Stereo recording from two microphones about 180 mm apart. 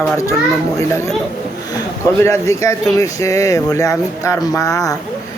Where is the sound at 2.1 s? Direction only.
15° left (ahead or behind).